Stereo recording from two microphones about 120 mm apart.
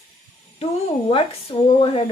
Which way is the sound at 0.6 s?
55° left (ahead or behind).